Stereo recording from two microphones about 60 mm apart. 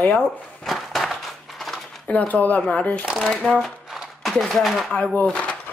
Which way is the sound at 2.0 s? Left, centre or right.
Left.